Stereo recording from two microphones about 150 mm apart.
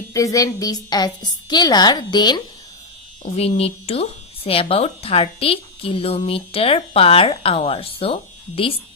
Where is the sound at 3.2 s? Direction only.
45° left (ahead or behind).